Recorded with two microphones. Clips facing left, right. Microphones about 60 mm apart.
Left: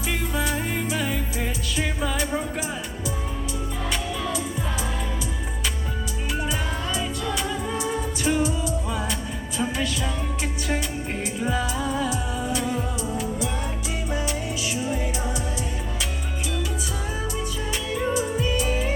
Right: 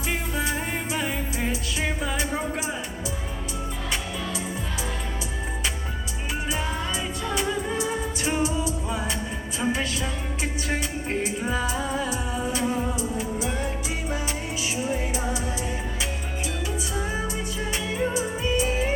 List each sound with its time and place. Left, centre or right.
0.1 s music: centre
7.3 s music: right